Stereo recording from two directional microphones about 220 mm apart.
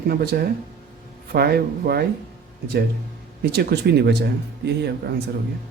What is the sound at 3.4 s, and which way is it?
Speech, 45° right (ahead or behind).